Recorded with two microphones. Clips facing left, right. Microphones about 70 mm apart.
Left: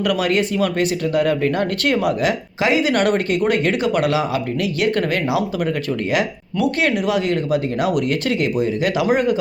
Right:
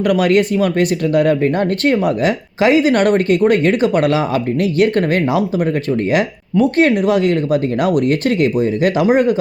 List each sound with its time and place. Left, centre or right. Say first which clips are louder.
0.1 s speech: right 8 dB; right